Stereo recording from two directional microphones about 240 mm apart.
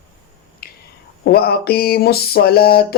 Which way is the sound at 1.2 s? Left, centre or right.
Left.